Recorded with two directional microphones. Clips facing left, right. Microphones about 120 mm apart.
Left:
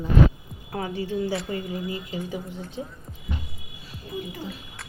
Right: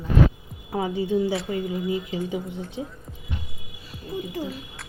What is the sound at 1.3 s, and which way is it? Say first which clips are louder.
Speech: right 2 dB; centre (ahead or behind).